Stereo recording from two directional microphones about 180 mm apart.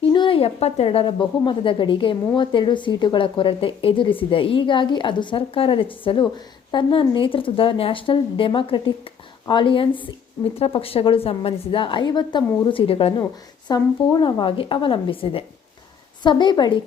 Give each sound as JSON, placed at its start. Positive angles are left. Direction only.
{"t": 0.0, "sound": "speech", "side_deg": 30}